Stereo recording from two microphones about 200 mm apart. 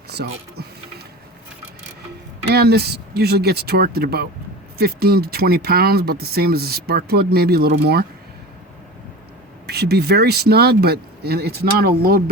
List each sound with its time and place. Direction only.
0.1 s mechanisms: 55° right (ahead or behind)
2.5 s speech: 55° right (ahead or behind)
9.6 s speech: 55° right (ahead or behind)